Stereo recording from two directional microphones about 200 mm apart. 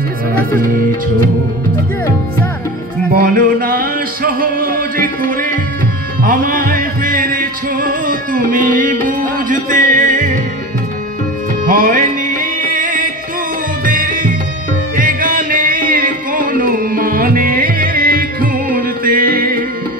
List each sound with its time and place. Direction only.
3.1 s music: 45° right (ahead or behind)
11.6 s music: 40° right (ahead or behind)